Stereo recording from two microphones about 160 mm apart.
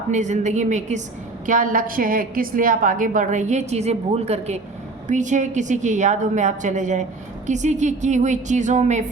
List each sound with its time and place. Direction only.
0.1 s a woman's voice: 50° right (ahead or behind)